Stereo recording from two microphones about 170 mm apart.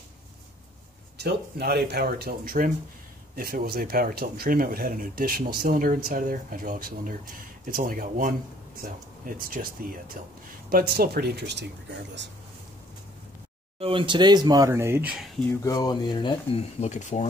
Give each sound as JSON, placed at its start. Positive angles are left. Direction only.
{"t": 1.1, "sound": "speech", "side_deg": -75}
{"t": 13.7, "sound": "speech", "side_deg": -30}
{"t": 15.6, "sound": "speech", "side_deg": 25}